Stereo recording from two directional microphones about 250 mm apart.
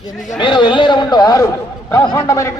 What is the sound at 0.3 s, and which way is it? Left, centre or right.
A man's voice, centre.